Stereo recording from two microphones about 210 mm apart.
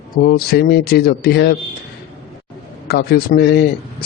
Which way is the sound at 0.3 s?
45° left (ahead or behind).